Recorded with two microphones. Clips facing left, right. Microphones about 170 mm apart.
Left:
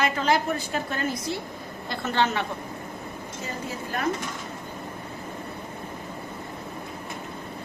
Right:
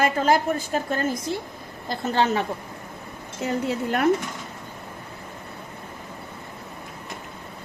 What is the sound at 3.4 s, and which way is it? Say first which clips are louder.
Speech: right 10 dB; 70° right (ahead or behind).